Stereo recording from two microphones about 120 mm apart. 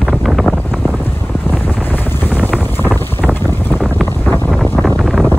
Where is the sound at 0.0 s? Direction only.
Centre (ahead or behind).